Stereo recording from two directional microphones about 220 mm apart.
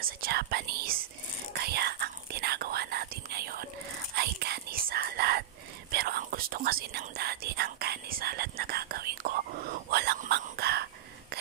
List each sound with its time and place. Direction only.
0.0 s speech: 45° right (ahead or behind)
1.5 s whispering: 45° right (ahead or behind)